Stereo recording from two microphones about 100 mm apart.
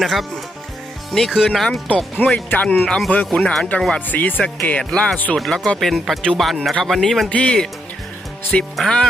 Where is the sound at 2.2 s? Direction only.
15° left (ahead or behind).